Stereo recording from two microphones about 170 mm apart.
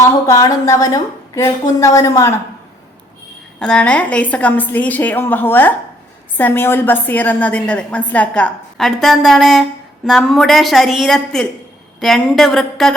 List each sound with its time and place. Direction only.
0.0 s a woman's voice: 20° left (ahead or behind)
3.6 s a woman's voice: 5° left (ahead or behind)